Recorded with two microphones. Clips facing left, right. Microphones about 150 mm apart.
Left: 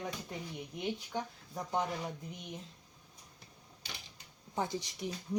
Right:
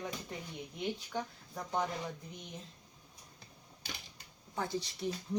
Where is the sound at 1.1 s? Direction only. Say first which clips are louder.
Even; 15° left (ahead or behind).